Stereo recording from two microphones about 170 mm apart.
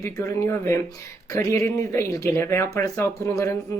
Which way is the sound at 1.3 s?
20° left (ahead or behind).